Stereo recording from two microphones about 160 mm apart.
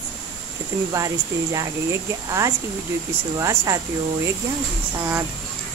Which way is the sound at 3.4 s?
20° right (ahead or behind).